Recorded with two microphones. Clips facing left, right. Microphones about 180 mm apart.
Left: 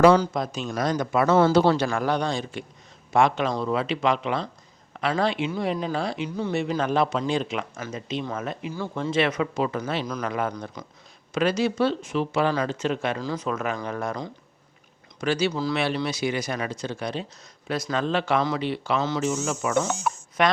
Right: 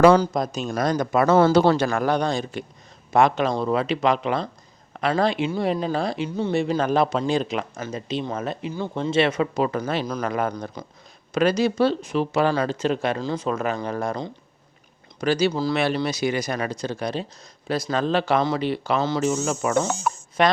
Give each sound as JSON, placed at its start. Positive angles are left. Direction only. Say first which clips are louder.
{"t": 0.2, "sound": "a man's voice", "louder": "right 3 dB", "side_deg": -40}
{"t": 6.2, "sound": "speech", "louder": "right 3 dB", "side_deg": -25}
{"t": 10.5, "sound": "speech", "louder": "right 3 dB", "side_deg": -30}